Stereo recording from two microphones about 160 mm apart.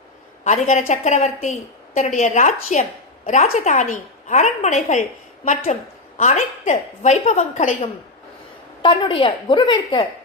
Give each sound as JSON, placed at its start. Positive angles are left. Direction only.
{"t": 0.4, "sound": "a woman's voice", "side_deg": 45}
{"t": 6.1, "sound": "a woman's voice", "side_deg": 50}
{"t": 8.8, "sound": "a woman's voice", "side_deg": 30}